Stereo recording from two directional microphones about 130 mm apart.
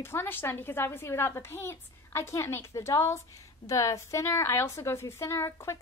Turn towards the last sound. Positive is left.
turn(degrees=20)  # may be behind; listen again after turning